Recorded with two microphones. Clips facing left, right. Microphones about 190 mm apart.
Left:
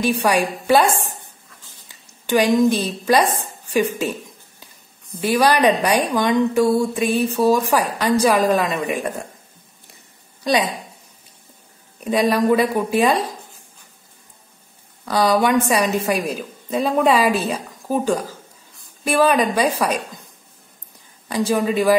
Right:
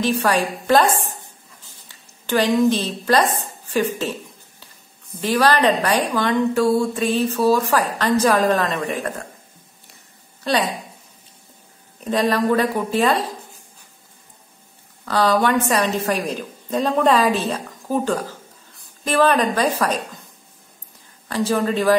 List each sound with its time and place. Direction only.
0.0 s a woman's voice: 15° left (ahead or behind)
2.2 s a woman's voice: 15° left (ahead or behind)
5.2 s a woman's voice: 10° left (ahead or behind)
10.4 s a woman's voice: 15° left (ahead or behind)
12.0 s a woman's voice: 10° left (ahead or behind)
15.0 s a woman's voice: 10° left (ahead or behind)
21.3 s a woman's voice: 10° left (ahead or behind)